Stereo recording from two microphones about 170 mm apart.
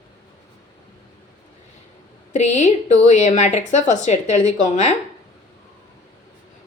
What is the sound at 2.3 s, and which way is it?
A woman's voice, 45° left (ahead or behind).